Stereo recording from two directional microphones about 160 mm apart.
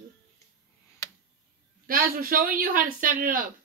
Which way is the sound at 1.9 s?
60° right (ahead or behind).